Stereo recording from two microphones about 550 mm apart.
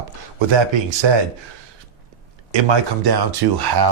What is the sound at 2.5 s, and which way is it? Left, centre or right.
Speech, right.